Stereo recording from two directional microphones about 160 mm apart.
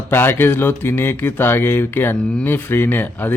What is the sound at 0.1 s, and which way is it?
Speech, 15° left (ahead or behind).